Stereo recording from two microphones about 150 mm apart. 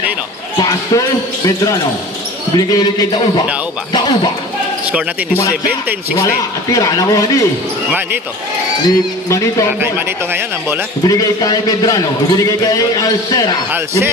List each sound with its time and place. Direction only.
0.6 s a man's voice: 25° left (ahead or behind)
6.1 s a man's voice: 20° left (ahead or behind)
8.8 s a man's voice: 20° left (ahead or behind)
9.9 s speech: 15° right (ahead or behind)
11.1 s a man's voice: 25° left (ahead or behind)
13.7 s speech: 15° right (ahead or behind)